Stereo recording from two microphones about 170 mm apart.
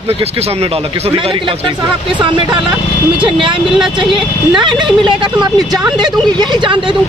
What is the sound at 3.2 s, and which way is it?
Speech, 30° right (ahead or behind).